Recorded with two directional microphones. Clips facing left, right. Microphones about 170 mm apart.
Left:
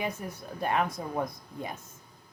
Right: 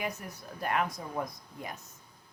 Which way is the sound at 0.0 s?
30° left (ahead or behind).